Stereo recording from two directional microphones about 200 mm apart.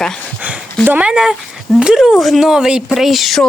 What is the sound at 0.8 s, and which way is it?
Speech, 5° right (ahead or behind).